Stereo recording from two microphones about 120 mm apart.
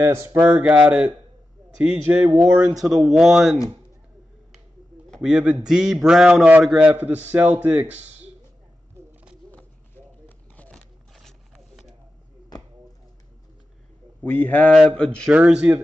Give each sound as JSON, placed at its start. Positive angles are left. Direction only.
{"t": 0.0, "sound": "a man's voice", "side_deg": -20}
{"t": 5.2, "sound": "a man's voice", "side_deg": -5}
{"t": 9.5, "sound": "a sound", "side_deg": 15}
{"t": 14.2, "sound": "speech", "side_deg": 15}
{"t": 15.3, "sound": "a man's voice", "side_deg": -10}